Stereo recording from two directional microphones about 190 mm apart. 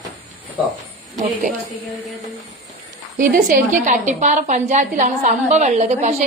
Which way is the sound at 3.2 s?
45° right (ahead or behind).